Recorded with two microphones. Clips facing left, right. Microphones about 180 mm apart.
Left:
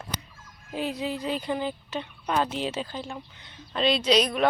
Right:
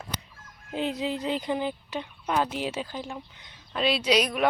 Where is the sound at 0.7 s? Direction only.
20° right (ahead or behind).